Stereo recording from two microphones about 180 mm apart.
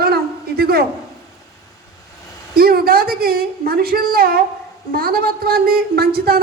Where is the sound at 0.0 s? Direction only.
60° right (ahead or behind).